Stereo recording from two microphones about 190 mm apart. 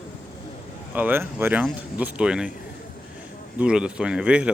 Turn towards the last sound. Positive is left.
turn(degrees=-5)  # may be behind; listen again after turning